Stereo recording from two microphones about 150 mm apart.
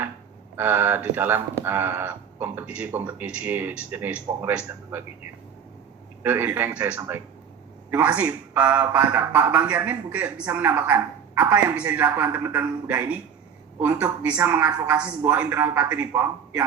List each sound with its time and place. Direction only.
0.5 s speech: 15° right (ahead or behind)
6.2 s speech: 10° right (ahead or behind)